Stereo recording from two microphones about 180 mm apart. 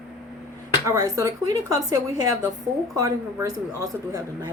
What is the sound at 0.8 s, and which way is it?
A man's voice, 20° right (ahead or behind).